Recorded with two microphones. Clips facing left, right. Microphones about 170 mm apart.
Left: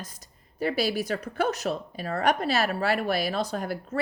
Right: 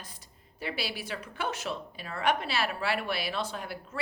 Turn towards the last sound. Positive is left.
turn(degrees=45)  # may be behind; listen again after turning